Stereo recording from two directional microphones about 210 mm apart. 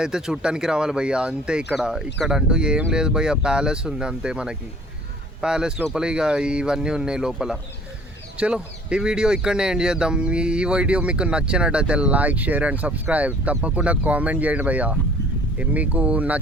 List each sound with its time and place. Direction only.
0.0 s speech: 5° right (ahead or behind)